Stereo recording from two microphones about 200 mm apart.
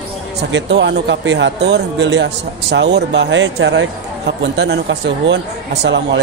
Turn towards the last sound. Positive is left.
turn(degrees=-60)  # may be behind; listen again after turning